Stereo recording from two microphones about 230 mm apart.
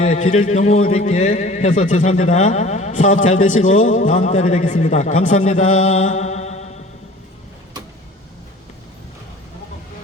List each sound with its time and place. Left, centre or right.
0.0 s a man's voice: left